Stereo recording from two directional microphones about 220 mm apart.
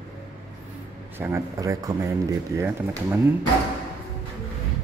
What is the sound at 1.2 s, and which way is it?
Speech, 10° right (ahead or behind).